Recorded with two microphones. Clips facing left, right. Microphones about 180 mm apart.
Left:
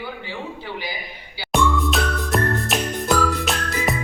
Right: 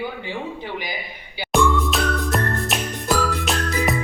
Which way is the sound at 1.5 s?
Centre (ahead or behind).